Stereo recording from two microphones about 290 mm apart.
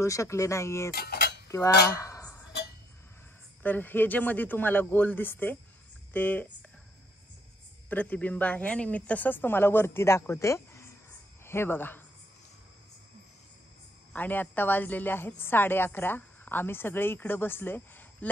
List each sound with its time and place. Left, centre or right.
0.0 s a woman's voice: centre
0.9 s cutlery: left
1.9 s cutlery: centre
3.6 s a woman's voice: centre
7.9 s a woman's voice: centre
14.1 s a woman's voice: centre